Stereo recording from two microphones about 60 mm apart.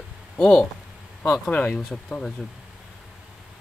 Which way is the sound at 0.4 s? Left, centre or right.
Centre.